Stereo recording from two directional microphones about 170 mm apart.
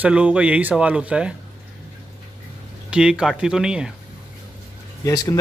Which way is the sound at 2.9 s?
5° right (ahead or behind).